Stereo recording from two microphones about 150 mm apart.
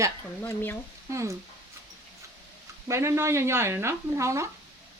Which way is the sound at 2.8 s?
20° right (ahead or behind).